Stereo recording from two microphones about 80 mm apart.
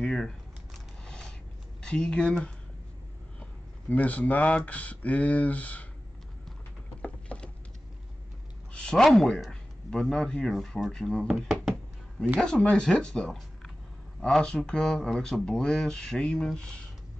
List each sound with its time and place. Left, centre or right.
0.0 s typing: centre
1.0 s a sound: centre
1.8 s speech: centre
3.9 s speech: centre
7.0 s a sound: centre
8.7 s speech: centre
12.4 s speech: centre